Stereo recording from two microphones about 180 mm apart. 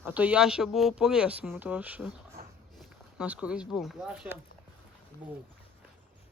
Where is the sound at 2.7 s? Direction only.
5° right (ahead or behind).